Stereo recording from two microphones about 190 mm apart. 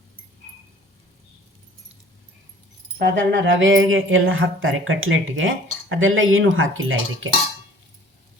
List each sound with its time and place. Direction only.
3.0 s speech: 70° right (ahead or behind); by 7.3 s 90° right